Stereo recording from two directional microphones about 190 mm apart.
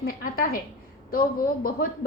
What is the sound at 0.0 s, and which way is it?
Speech, 50° left (ahead or behind).